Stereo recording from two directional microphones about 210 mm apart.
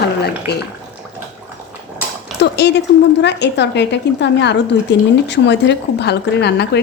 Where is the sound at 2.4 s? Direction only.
50° left (ahead or behind).